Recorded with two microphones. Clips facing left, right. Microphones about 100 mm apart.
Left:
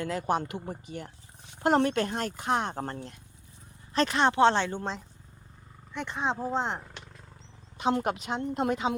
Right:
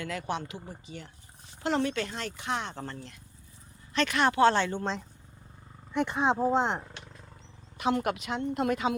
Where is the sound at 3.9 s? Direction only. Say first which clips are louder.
Left 1 dB; 35° left (ahead or behind); by 5.0 s 10° left (ahead or behind).